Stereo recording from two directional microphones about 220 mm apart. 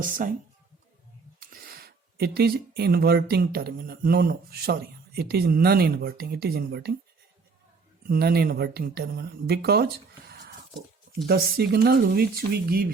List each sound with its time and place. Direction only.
0.0 s speech: 40° right (ahead or behind)
1.4 s speech: 40° right (ahead or behind)
8.0 s speech: 45° right (ahead or behind)
10.2 s a sound: 45° right (ahead or behind)
11.3 s speech: 45° right (ahead or behind)